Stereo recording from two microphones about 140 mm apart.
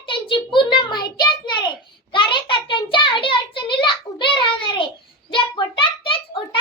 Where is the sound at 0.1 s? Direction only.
35° left (ahead or behind).